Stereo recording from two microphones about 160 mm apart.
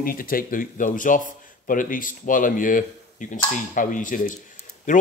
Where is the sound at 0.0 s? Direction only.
65° left (ahead or behind).